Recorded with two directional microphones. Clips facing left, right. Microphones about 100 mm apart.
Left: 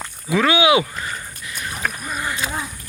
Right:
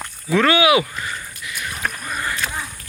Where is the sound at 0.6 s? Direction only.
25° left (ahead or behind).